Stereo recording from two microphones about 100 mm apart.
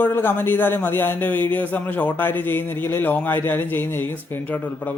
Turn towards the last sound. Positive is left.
turn(degrees=20)  # may be behind; listen again after turning